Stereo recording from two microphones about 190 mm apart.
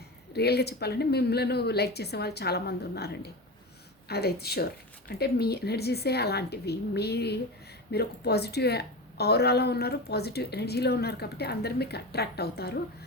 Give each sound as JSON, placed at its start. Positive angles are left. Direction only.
{"t": 0.3, "sound": "a woman's voice", "side_deg": 60}